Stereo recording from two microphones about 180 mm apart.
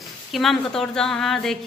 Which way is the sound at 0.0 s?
Centre (ahead or behind).